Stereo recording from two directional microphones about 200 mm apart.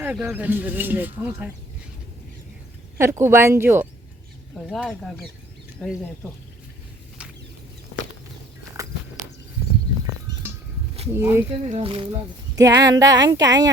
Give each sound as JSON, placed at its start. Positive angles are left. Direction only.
{"t": 0.0, "sound": "speech", "side_deg": -10}
{"t": 3.0, "sound": "speech", "side_deg": -15}
{"t": 8.8, "sound": "walk", "side_deg": -15}
{"t": 11.1, "sound": "speech", "side_deg": -10}
{"t": 11.7, "sound": "speech", "side_deg": -25}